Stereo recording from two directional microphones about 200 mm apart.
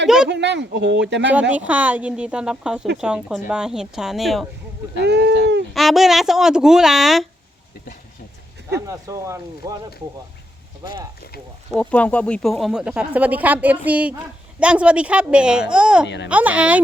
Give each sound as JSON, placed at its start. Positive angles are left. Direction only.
{"t": 0.3, "sound": "speech", "side_deg": -60}
{"t": 1.3, "sound": "speech", "side_deg": -5}
{"t": 5.0, "sound": "speech", "side_deg": -55}
{"t": 5.7, "sound": "speech", "side_deg": 0}
{"t": 8.9, "sound": "speech", "side_deg": -15}
{"t": 11.7, "sound": "speech", "side_deg": 5}
{"t": 16.0, "sound": "speech", "side_deg": 60}
{"t": 16.3, "sound": "speech", "side_deg": -5}